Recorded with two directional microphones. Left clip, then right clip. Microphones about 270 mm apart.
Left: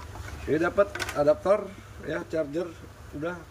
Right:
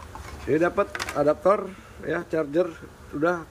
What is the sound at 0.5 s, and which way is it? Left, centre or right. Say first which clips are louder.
A man's voice: right 1 dB; centre.